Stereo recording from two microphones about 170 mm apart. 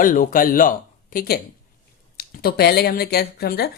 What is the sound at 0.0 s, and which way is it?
Speech, 55° left (ahead or behind).